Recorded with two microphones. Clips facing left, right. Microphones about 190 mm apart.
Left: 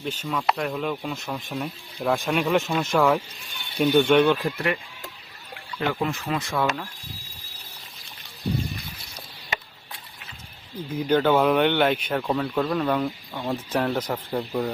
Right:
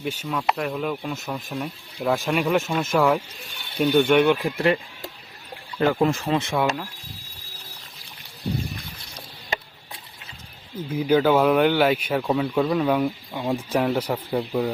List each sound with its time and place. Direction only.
0.0 s speech: 10° right (ahead or behind)
4.5 s speech: 30° right (ahead or behind)
5.8 s speech: 45° right (ahead or behind)
6.3 s speech: 25° right (ahead or behind)
10.8 s speech: 5° right (ahead or behind)